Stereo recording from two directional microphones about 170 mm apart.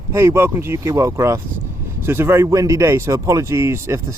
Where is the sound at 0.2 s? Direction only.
15° right (ahead or behind).